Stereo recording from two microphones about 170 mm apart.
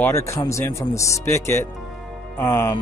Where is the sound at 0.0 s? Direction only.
15° left (ahead or behind).